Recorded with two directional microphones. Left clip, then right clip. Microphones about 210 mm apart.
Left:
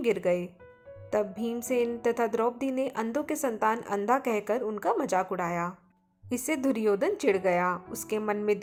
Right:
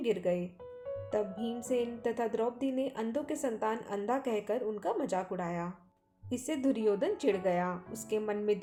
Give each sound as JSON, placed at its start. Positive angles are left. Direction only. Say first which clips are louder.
{"t": 0.0, "sound": "a woman's voice", "louder": "left 5 dB", "side_deg": 20}